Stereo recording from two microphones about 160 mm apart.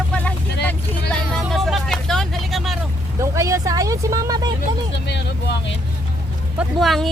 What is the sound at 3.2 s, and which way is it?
Vehicle, 20° right (ahead or behind).